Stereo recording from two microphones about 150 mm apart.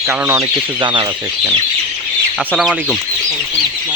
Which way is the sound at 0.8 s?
30° right (ahead or behind).